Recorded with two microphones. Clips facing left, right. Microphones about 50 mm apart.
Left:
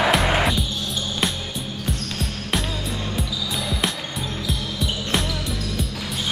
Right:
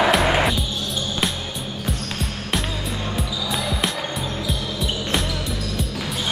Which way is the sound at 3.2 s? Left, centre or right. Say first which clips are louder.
Right 2 dB; centre.